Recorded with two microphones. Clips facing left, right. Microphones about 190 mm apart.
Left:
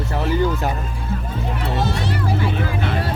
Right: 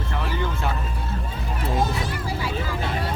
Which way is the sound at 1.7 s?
70° left (ahead or behind).